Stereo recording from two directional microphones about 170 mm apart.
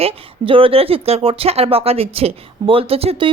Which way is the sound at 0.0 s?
30° right (ahead or behind).